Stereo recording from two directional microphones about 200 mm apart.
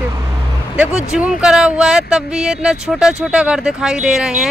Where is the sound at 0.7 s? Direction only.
5° right (ahead or behind).